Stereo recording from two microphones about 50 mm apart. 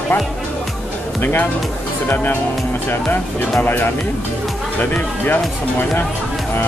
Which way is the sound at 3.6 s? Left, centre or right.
Left.